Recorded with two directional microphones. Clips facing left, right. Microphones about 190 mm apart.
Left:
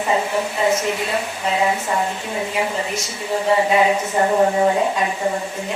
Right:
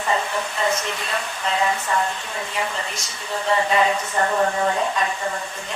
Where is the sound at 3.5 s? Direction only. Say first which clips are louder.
Left 3 dB; 10° left (ahead or behind).